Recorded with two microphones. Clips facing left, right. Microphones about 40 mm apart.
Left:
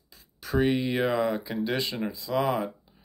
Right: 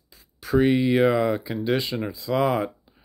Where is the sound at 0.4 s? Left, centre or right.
Centre.